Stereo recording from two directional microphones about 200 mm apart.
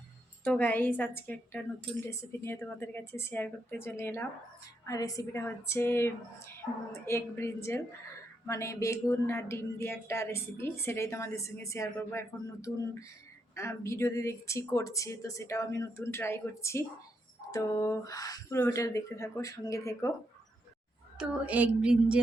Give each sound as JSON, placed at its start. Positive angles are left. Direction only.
{"t": 0.4, "sound": "speech", "side_deg": 10}
{"t": 21.2, "sound": "a woman's voice", "side_deg": -5}